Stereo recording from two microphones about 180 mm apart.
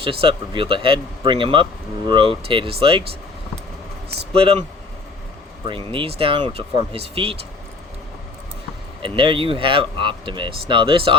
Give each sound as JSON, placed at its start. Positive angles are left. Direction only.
{"t": 0.0, "sound": "speech", "side_deg": -30}
{"t": 4.3, "sound": "speech", "side_deg": -30}
{"t": 5.6, "sound": "speech", "side_deg": -30}
{"t": 9.0, "sound": "speech", "side_deg": -30}